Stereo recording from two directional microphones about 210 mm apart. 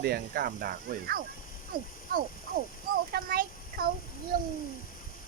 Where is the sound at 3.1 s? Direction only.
45° right (ahead or behind).